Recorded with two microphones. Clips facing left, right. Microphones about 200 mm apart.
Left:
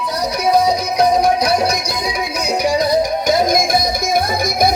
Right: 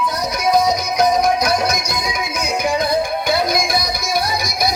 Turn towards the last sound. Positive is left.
turn(degrees=45)  # may be behind; listen again after turning